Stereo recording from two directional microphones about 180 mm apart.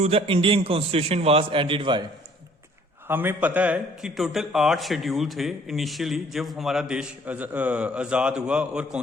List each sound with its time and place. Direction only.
0.0 s a man's voice: 35° right (ahead or behind)
3.1 s a man's voice: 10° right (ahead or behind)